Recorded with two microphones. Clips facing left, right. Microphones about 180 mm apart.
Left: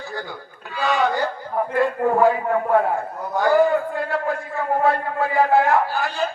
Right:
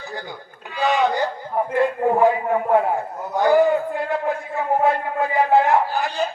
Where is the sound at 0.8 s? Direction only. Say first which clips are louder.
Right 1 dB; 20° right (ahead or behind).